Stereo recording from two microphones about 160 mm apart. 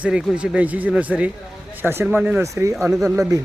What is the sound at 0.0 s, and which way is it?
Speech, 5° right (ahead or behind).